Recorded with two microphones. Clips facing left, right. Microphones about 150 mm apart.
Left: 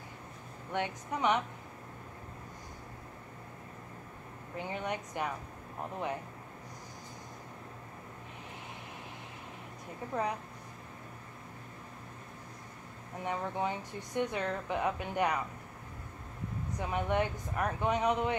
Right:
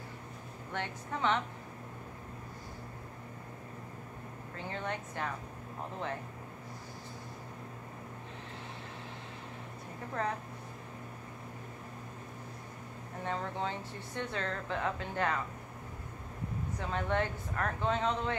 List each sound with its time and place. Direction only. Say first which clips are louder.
0.7 s speech: left 3 dB; 15° left (ahead or behind)
4.6 s speech: left 2 dB; 15° left (ahead or behind)
10.2 s speech: left 1 dB; 15° left (ahead or behind)
13.2 s speech: left 2 dB; 15° left (ahead or behind)
16.8 s speech: left 2 dB; 15° left (ahead or behind)